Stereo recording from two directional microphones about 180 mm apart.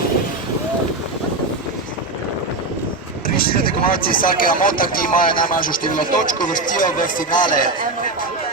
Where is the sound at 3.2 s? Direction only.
55° left (ahead or behind).